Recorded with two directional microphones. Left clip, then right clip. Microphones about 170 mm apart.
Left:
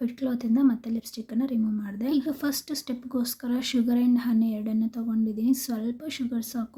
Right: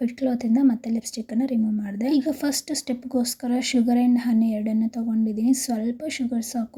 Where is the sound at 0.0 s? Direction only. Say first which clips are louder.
Right 5 dB; 15° right (ahead or behind).